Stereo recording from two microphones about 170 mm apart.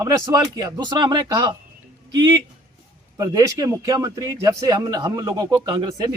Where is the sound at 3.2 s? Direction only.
20° right (ahead or behind).